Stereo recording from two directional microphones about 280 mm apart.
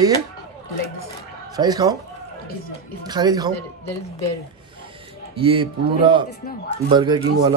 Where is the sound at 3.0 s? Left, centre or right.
Centre.